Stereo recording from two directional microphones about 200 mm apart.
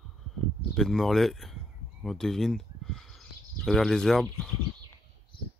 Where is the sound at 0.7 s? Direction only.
Centre (ahead or behind).